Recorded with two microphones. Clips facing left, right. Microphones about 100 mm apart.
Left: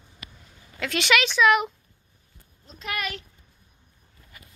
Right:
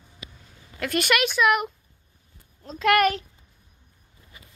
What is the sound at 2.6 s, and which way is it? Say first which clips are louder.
Speech: right 13 dB; 75° right (ahead or behind).